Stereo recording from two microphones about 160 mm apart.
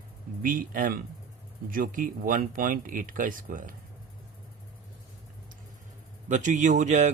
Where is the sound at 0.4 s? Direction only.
60° right (ahead or behind).